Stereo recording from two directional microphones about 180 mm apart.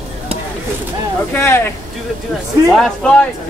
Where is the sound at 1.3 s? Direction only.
15° left (ahead or behind).